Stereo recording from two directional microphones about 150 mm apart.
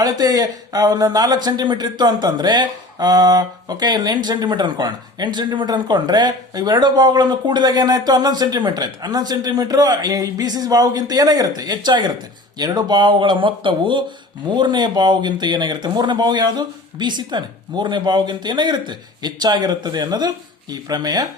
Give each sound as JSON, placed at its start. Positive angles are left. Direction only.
{"t": 0.0, "sound": "speech", "side_deg": -25}